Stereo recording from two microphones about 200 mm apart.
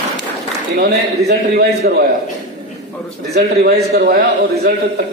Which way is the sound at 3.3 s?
55° right (ahead or behind).